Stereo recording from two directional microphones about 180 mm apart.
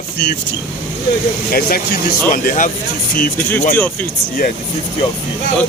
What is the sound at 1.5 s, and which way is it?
Speech, 55° left (ahead or behind).